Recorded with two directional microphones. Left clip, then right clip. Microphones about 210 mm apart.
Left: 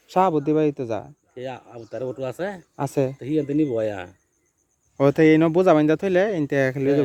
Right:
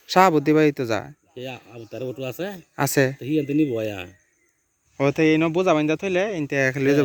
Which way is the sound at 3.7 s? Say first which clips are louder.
Left 2 dB; 45° right (ahead or behind).